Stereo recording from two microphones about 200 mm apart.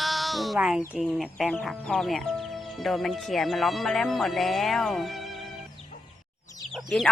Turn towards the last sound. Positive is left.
turn(degrees=0)  # may be behind; listen again after turning